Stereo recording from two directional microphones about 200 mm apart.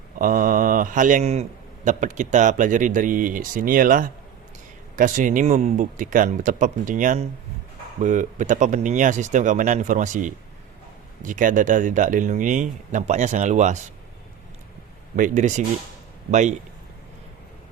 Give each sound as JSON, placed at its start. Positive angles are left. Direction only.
{"t": 0.2, "sound": "a man's voice", "side_deg": -45}
{"t": 15.1, "sound": "a man's voice", "side_deg": -40}